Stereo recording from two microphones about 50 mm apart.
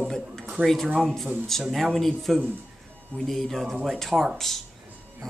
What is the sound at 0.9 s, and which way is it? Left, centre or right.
Speech, centre.